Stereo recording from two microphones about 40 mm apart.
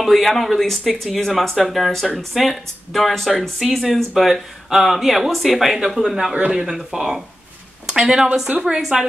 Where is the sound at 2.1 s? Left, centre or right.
Centre.